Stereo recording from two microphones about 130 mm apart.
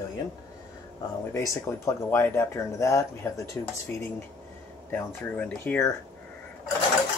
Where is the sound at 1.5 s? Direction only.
20° left (ahead or behind).